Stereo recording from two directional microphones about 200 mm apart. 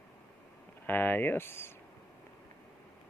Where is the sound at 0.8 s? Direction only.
10° left (ahead or behind).